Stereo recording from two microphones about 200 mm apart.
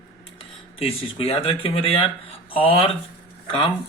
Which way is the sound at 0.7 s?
30° left (ahead or behind).